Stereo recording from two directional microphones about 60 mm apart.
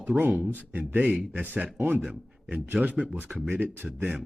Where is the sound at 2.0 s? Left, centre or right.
Centre.